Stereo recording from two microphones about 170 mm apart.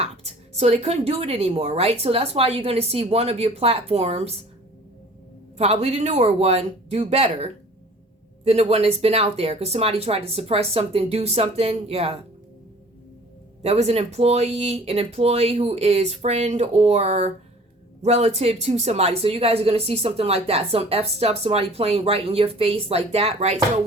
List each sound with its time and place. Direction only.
0.5 s speech: 40° right (ahead or behind)
5.5 s speech: 35° right (ahead or behind)
13.6 s speech: 35° right (ahead or behind)